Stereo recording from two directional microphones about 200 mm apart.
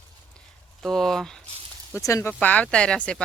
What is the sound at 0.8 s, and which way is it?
Speech, centre (ahead or behind).